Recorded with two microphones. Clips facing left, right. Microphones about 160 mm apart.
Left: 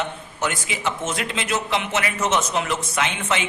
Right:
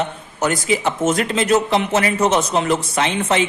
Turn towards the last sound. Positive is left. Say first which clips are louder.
# right 6 dB
turn(degrees=-35)  # may be behind; listen again after turning